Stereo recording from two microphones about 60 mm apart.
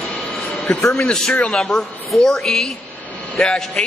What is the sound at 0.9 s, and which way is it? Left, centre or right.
Speech, centre.